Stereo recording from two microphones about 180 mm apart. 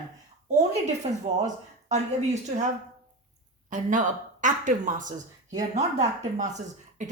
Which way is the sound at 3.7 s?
45° right (ahead or behind).